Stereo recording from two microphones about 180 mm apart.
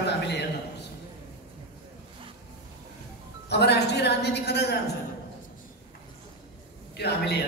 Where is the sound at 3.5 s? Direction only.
70° left (ahead or behind).